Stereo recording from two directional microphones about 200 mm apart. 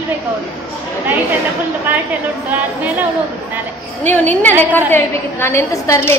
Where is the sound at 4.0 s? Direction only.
10° left (ahead or behind).